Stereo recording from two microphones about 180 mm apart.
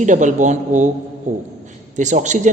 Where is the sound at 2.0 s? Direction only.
40° right (ahead or behind).